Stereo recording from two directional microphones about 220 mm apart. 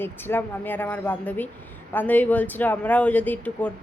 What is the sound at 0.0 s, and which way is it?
A woman's voice, 10° left (ahead or behind).